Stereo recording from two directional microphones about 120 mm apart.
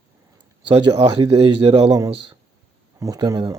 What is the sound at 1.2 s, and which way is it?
Speech, 30° right (ahead or behind).